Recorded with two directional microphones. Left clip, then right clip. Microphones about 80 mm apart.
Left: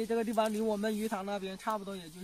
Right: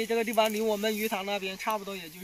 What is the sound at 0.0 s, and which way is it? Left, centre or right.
Speech, centre.